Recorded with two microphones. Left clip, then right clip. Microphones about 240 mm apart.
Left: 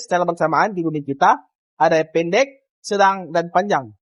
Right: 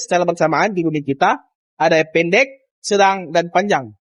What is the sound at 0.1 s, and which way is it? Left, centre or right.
A man's voice, right.